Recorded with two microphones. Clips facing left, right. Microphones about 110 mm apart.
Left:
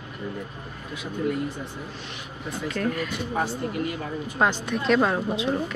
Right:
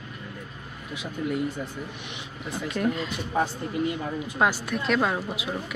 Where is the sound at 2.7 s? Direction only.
20° right (ahead or behind).